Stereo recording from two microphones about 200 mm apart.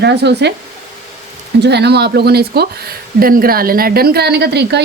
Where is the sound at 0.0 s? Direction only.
60° right (ahead or behind).